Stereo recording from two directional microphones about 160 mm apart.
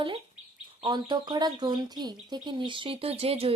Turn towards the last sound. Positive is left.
turn(degrees=-40)  # may be behind; listen again after turning